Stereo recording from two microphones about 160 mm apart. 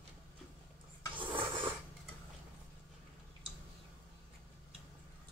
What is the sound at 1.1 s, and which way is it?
Rub, 30° right (ahead or behind).